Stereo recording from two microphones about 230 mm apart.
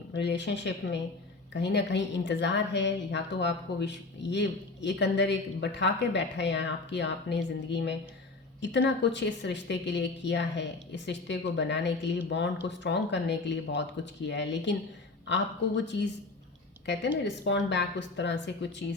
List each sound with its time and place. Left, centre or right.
0.1 s a woman's voice: left